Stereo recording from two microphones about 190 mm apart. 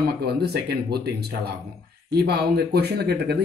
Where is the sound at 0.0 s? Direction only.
55° right (ahead or behind).